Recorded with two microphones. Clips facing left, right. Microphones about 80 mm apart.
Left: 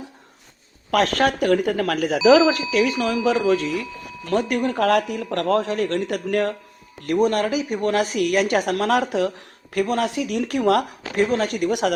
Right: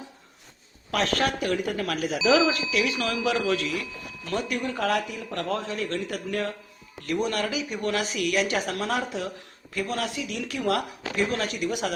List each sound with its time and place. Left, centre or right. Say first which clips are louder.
0.9 s speech: left 6 dB; left
4.3 s speech: left 7 dB; left
4.8 s speech: left 7 dB; left
7.0 s speech: left 7 dB; left
9.7 s speech: left 8 dB; left
11.5 s speech: left 7 dB; left